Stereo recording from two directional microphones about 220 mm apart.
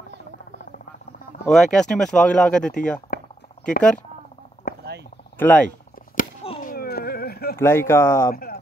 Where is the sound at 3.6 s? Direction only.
25° left (ahead or behind).